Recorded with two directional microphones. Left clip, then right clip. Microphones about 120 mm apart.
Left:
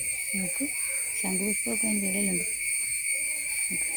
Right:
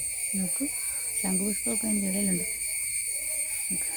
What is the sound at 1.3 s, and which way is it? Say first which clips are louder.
Speech: left 1 dB; 25° right (ahead or behind).